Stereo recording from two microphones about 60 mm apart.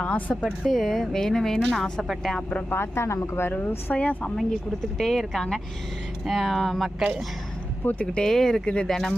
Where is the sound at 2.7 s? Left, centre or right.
Left.